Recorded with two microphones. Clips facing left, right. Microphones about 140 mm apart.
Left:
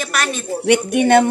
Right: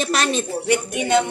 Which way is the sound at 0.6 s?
70° left (ahead or behind).